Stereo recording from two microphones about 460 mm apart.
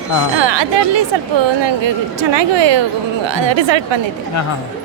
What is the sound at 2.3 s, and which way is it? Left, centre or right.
Speech, right.